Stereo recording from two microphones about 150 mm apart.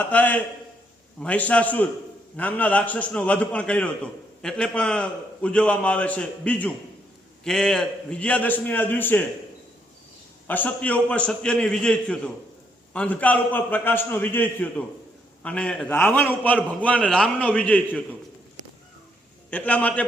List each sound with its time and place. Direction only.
0.0 s a man's voice: 10° left (ahead or behind)
10.4 s a man's voice: 10° left (ahead or behind)
19.5 s a man's voice: 10° left (ahead or behind)